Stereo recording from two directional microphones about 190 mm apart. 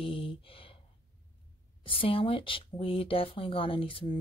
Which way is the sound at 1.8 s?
30° left (ahead or behind).